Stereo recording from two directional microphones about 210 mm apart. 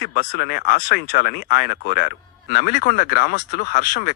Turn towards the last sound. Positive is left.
turn(degrees=50)  # may be behind; listen again after turning